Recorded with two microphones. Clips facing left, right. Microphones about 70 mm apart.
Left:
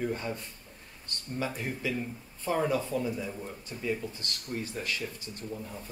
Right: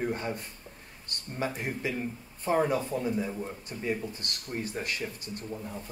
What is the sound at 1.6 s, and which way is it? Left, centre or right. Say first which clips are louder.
Speech: right 1 dB; right.